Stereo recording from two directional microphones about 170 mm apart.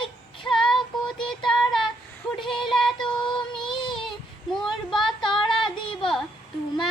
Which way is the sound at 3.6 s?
25° left (ahead or behind).